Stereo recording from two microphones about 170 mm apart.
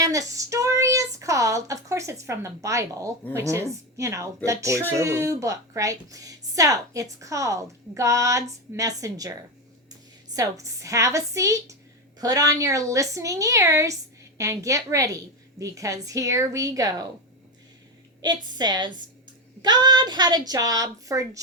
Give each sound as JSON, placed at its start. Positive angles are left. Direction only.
{"t": 0.0, "sound": "a woman's voice", "side_deg": -20}
{"t": 10.3, "sound": "a woman's voice", "side_deg": -20}
{"t": 18.2, "sound": "a woman's voice", "side_deg": -25}